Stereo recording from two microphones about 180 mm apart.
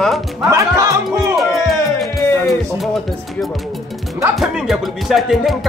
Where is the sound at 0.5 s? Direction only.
20° right (ahead or behind).